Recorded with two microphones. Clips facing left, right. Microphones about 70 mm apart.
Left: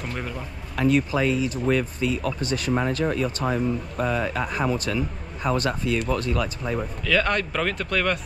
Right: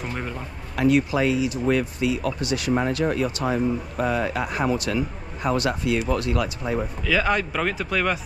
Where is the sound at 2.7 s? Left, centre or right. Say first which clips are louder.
Right 1 dB; right.